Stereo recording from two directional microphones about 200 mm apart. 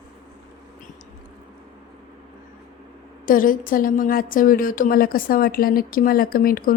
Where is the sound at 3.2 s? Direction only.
45° left (ahead or behind).